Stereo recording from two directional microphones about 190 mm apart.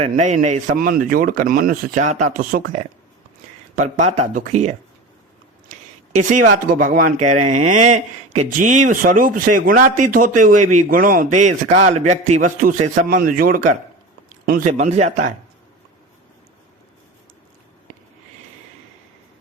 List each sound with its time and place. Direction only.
0.0 s speech: 40° right (ahead or behind)
6.7 s speech: 45° right (ahead or behind)